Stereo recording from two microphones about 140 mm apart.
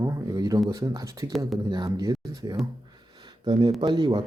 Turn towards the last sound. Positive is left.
turn(degrees=-35)  # may be behind; listen again after turning